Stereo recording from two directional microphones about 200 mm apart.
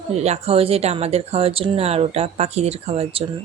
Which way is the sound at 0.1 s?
35° right (ahead or behind).